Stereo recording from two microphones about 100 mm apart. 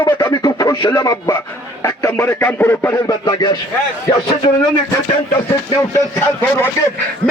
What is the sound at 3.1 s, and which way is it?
Speech, 40° left (ahead or behind).